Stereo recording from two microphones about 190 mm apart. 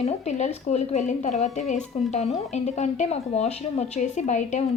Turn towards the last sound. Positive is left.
turn(degrees=40)  # may be behind; listen again after turning